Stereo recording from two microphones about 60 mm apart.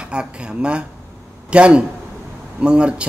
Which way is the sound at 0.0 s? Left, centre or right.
Centre.